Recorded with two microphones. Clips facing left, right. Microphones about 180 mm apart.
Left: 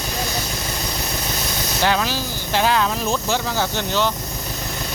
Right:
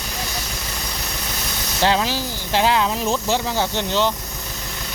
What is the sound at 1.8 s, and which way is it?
Speech, 25° right (ahead or behind).